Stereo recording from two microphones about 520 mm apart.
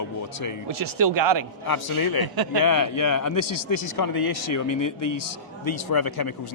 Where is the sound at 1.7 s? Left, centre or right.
Left.